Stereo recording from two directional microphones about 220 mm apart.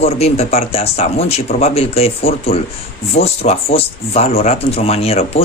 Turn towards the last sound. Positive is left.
turn(degrees=25)  # may be behind; listen again after turning